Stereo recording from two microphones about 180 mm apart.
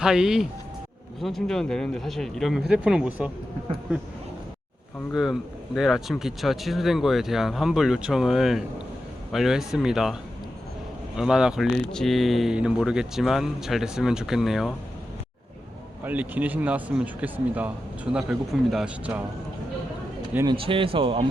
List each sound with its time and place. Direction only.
0.0 s speech: 5° right (ahead or behind)
5.1 s speech: centre (ahead or behind)
11.2 s speech: 5° right (ahead or behind)
16.0 s speech: 10° right (ahead or behind)
20.3 s speech: 20° right (ahead or behind)
20.6 s speech: 30° right (ahead or behind)